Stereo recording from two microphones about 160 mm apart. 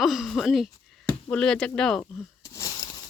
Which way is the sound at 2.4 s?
20° left (ahead or behind).